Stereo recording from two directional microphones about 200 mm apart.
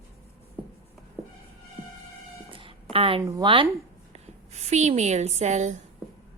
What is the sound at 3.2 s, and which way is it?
A woman's voice, 20° right (ahead or behind).